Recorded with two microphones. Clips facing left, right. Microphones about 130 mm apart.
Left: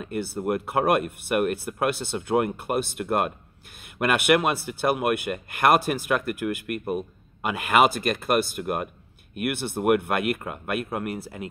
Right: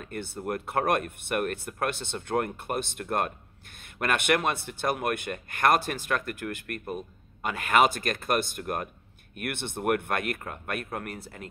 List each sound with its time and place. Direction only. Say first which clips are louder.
0.0 s speech: left 6 dB; 5° left (ahead or behind)